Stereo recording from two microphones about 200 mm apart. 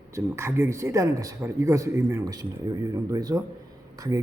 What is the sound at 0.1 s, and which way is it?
Speech, 15° right (ahead or behind).